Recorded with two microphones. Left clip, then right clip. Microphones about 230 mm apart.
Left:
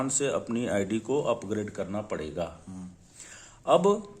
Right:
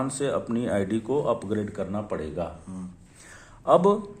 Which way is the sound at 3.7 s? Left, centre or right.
Centre.